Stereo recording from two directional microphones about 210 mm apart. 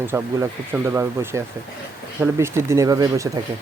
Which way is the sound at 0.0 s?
10° right (ahead or behind).